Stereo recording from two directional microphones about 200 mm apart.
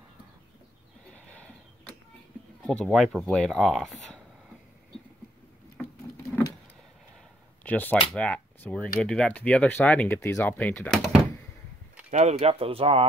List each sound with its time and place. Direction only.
1.1 s a sound: 5° left (ahead or behind)
2.6 s speech: centre (ahead or behind)
7.6 s speech: 10° left (ahead or behind)
12.1 s speech: 35° right (ahead or behind)